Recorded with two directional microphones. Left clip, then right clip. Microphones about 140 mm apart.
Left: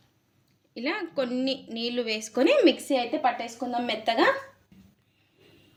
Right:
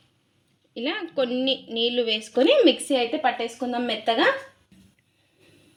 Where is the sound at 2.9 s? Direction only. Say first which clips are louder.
Right 2 dB; 45° right (ahead or behind).